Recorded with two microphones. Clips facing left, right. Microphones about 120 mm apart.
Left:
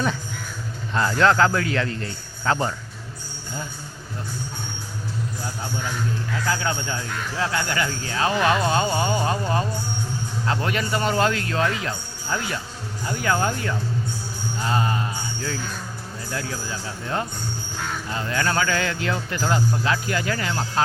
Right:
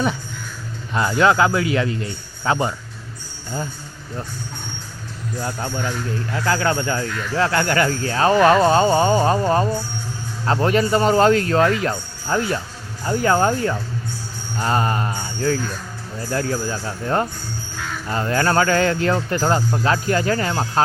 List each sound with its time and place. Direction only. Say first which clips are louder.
0.9 s a man's voice: right 2 dB; 10° right (ahead or behind)
5.4 s speech: right 5 dB; 70° right (ahead or behind); by 13.7 s 35° right (ahead or behind)
14.6 s mantra: right 4 dB; 50° right (ahead or behind)
16.3 s speech: right 8 dB; 45° right (ahead or behind)